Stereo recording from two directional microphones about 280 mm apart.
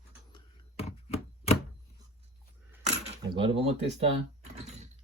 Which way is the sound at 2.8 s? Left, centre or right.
Centre.